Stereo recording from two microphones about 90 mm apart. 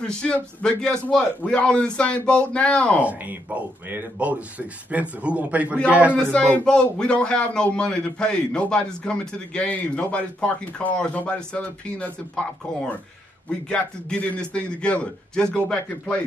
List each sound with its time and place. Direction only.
0.0 s speech: 10° left (ahead or behind)
3.0 s speech: 15° right (ahead or behind)
6.3 s speech: 10° left (ahead or behind)